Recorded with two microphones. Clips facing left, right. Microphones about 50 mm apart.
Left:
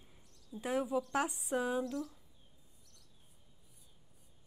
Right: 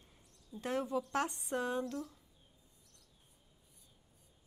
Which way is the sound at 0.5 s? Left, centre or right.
Centre.